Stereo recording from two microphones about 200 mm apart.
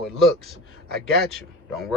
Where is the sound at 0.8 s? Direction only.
50° right (ahead or behind).